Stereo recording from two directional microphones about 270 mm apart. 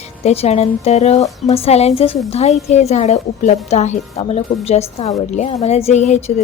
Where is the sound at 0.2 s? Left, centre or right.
Left.